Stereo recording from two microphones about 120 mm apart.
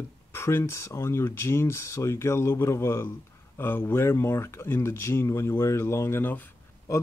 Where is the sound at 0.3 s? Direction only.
20° left (ahead or behind).